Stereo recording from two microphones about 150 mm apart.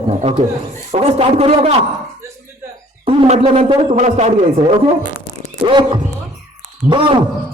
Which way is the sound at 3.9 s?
55° right (ahead or behind).